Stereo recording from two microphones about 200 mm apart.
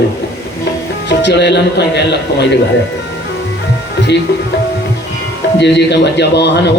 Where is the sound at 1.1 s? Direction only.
60° left (ahead or behind).